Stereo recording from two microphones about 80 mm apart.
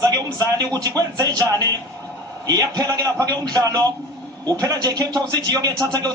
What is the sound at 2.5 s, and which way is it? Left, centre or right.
Speech, right.